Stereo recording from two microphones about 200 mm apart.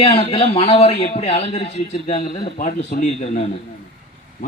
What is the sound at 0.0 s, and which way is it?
A man's voice, 25° left (ahead or behind).